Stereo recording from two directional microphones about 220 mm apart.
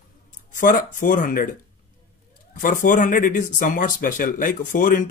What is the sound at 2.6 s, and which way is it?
Speech, 35° left (ahead or behind).